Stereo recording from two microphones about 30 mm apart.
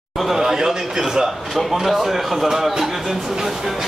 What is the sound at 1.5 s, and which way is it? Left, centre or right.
A man's voice, centre.